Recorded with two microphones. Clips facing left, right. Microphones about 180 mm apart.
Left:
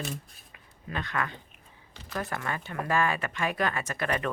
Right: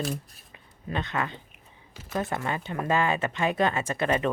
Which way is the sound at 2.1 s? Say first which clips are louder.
Right 4 dB; 25° right (ahead or behind).